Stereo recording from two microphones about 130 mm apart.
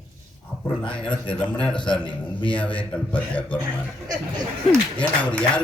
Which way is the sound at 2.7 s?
10° left (ahead or behind).